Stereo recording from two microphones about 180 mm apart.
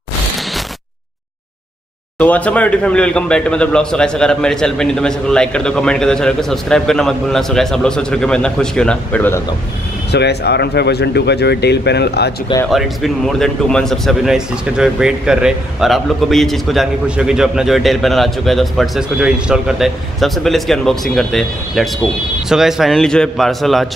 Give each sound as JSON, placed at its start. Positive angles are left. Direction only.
{"t": 2.1, "sound": "speech", "side_deg": 10}
{"t": 10.1, "sound": "speech", "side_deg": 65}
{"t": 12.6, "sound": "speech", "side_deg": 0}